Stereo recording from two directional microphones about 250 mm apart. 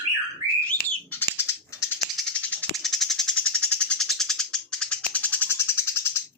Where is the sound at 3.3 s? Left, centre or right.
Left.